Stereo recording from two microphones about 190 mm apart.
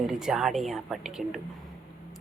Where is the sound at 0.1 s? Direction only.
5° right (ahead or behind).